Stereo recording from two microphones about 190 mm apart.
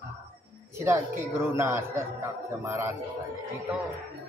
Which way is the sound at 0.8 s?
15° right (ahead or behind).